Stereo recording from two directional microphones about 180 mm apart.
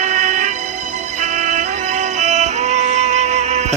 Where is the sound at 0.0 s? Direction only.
40° right (ahead or behind).